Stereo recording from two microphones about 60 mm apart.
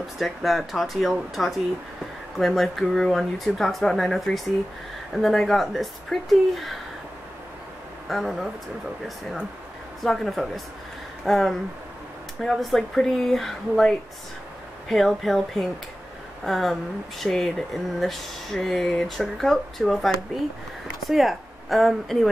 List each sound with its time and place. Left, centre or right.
0.2 s speech: centre
8.1 s speech: centre
10.0 s speech: centre